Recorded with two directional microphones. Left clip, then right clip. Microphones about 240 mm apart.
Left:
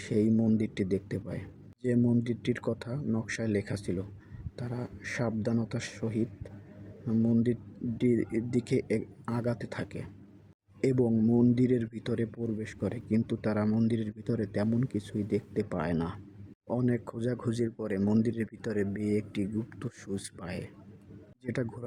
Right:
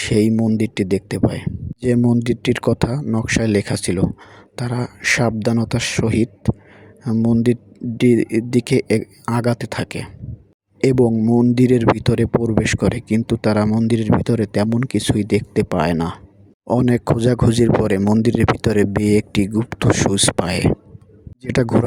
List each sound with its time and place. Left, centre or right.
0.0 s speech: right